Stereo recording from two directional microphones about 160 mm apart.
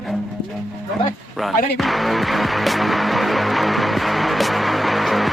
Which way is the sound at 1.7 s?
Centre (ahead or behind).